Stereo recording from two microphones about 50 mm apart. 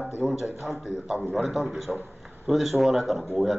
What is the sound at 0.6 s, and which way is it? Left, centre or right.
A man's voice, centre.